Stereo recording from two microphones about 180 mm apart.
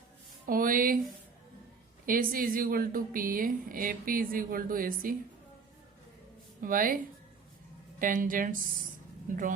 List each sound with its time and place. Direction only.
0.4 s a woman's voice: 50° right (ahead or behind)
2.0 s a woman's voice: 50° right (ahead or behind)
6.6 s a woman's voice: 50° right (ahead or behind)